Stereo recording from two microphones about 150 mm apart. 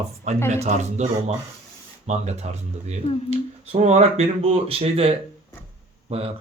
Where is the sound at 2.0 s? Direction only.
45° right (ahead or behind).